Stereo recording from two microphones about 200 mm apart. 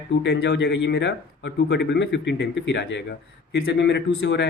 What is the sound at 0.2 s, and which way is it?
Speech, 60° left (ahead or behind).